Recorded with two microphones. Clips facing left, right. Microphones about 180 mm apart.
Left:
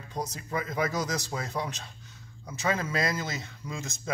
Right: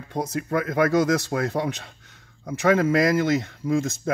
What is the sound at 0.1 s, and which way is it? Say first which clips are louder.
Speech: right 8 dB; 60° right (ahead or behind).